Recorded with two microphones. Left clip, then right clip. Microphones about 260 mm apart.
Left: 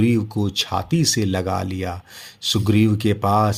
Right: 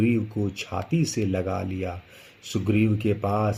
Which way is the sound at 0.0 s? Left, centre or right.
Left.